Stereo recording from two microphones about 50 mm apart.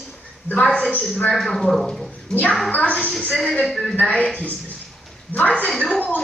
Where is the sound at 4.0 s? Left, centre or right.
Left.